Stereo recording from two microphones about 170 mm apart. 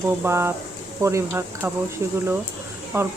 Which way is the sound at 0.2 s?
15° right (ahead or behind).